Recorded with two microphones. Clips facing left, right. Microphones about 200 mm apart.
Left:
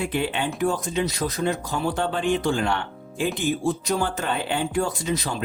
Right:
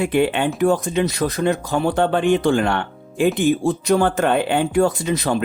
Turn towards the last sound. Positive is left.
turn(degrees=-60)  # may be behind; listen again after turning